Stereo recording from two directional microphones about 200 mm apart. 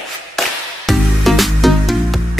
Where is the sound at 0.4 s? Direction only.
Centre (ahead or behind).